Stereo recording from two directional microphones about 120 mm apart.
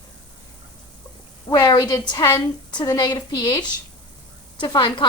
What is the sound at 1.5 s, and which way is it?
A woman's voice, 35° left (ahead or behind).